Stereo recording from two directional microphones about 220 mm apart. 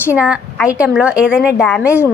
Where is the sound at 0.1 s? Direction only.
5° right (ahead or behind).